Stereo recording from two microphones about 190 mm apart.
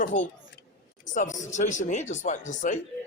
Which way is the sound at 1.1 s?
40° left (ahead or behind).